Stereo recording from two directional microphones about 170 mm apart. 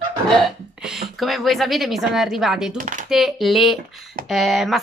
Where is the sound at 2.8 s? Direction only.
50° right (ahead or behind).